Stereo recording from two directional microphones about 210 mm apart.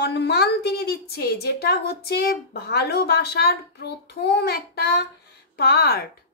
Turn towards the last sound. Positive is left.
turn(degrees=50)  # may be behind; listen again after turning